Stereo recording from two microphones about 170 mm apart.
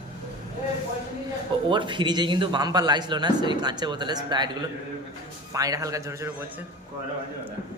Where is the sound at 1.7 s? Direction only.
30° right (ahead or behind).